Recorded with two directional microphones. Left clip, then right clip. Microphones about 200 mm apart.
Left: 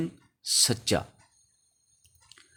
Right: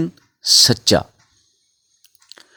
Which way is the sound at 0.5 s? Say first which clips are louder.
Right 13 dB; 45° right (ahead or behind).